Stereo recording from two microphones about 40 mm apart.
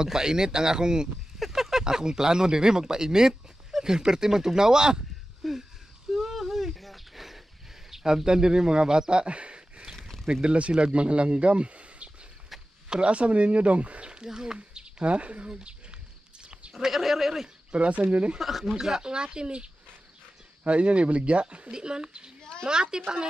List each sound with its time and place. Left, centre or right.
0.0 s speech: centre
5.4 s speech: centre
6.0 s a sound: centre
7.9 s speech: centre; by 9.8 s right
9.9 s a sound: centre
10.4 s a man's voice: right
16.8 s speech: centre
17.7 s a man's voice: right
18.4 s a man's voice: centre; by 21.6 s right
21.6 s speech: right
22.4 s a sound: centre
22.7 s speech: centre